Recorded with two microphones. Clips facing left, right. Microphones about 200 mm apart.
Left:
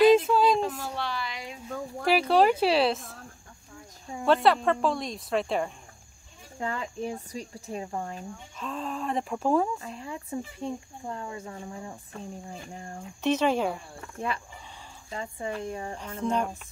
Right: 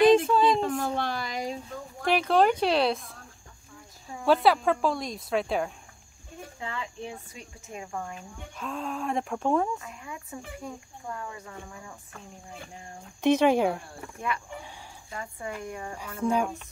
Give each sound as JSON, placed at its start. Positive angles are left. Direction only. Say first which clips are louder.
{"t": 0.0, "sound": "a sound", "louder": "even", "side_deg": 5}
{"t": 0.7, "sound": "a sound", "louder": "right 4 dB", "side_deg": -50}
{"t": 2.0, "sound": "speech", "louder": "left 1 dB", "side_deg": 5}
{"t": 4.3, "sound": "speech", "louder": "even", "side_deg": 0}
{"t": 6.6, "sound": "speech", "louder": "left 5 dB", "side_deg": 45}
{"t": 8.5, "sound": "speech", "louder": "right 1 dB", "side_deg": 0}
{"t": 9.8, "sound": "speech", "louder": "left 4 dB", "side_deg": 30}
{"t": 13.2, "sound": "speech", "louder": "right 3 dB", "side_deg": -10}
{"t": 15.0, "sound": "speech", "louder": "left 3 dB", "side_deg": 25}
{"t": 16.2, "sound": "speech", "louder": "right 2 dB", "side_deg": -10}